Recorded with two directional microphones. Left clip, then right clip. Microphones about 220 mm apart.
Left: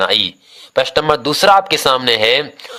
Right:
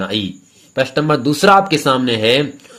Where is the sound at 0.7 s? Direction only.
40° left (ahead or behind).